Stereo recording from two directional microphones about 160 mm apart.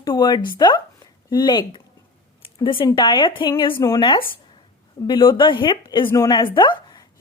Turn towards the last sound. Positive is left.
turn(degrees=30)  # may be behind; listen again after turning